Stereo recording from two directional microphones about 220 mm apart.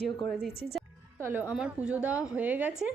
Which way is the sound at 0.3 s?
Centre (ahead or behind).